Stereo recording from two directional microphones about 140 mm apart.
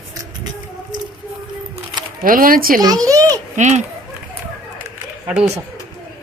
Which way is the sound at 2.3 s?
90° right.